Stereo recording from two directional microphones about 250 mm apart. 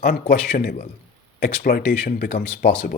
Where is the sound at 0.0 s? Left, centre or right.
Left.